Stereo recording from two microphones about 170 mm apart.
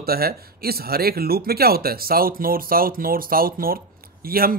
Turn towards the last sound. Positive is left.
turn(degrees=-60)  # may be behind; listen again after turning